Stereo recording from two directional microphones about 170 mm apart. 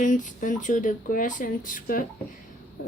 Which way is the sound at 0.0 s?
50° left (ahead or behind).